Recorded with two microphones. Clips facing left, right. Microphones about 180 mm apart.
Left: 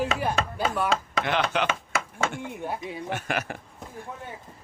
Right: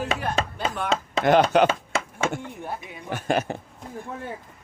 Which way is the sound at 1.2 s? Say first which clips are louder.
Right 11 dB; 40° right (ahead or behind).